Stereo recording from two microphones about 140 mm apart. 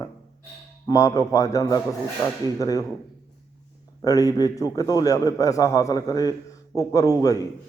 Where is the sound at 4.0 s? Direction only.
25° left (ahead or behind).